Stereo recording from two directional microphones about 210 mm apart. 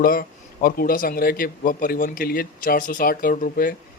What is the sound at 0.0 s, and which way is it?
Speech, 45° left (ahead or behind).